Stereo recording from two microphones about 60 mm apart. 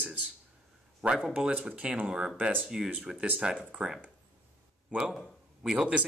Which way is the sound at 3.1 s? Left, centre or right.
Right.